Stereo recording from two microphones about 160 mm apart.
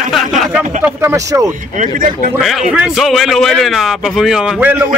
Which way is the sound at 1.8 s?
55° right (ahead or behind).